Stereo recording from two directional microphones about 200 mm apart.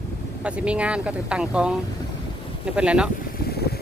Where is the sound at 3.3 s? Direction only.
50° left (ahead or behind).